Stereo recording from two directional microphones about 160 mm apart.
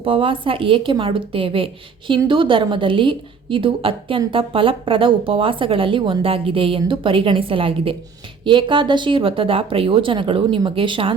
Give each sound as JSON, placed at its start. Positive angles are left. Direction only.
{"t": 0.0, "sound": "a woman's voice", "side_deg": -35}